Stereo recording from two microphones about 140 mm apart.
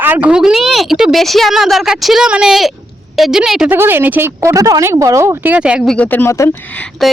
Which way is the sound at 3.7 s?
15° right (ahead or behind).